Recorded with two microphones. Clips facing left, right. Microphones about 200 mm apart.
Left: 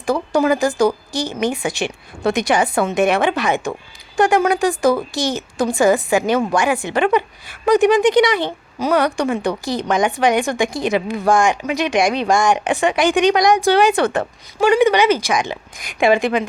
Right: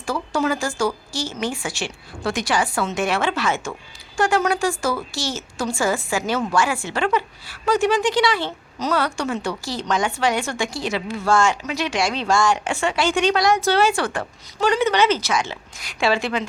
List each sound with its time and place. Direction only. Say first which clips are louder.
0.0 s a woman's voice: left 6 dB; 15° left (ahead or behind)